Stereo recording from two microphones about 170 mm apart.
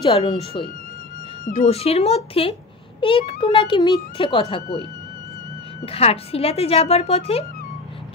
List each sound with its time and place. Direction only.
0.0 s speech: 30° left (ahead or behind)
1.7 s speech: 35° left (ahead or behind)
5.9 s speech: 35° left (ahead or behind)